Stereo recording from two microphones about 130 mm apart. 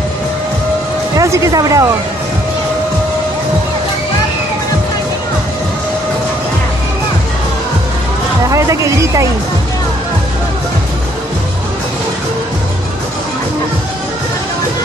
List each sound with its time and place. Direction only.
1.1 s speech: 25° right (ahead or behind)
8.5 s speech: 25° right (ahead or behind)